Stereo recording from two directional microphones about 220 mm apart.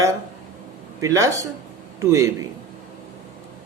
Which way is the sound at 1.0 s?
15° right (ahead or behind).